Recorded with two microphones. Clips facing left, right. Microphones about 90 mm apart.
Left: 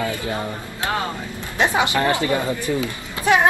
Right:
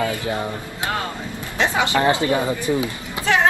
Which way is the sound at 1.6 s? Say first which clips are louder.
Left 1 dB; 20° left (ahead or behind).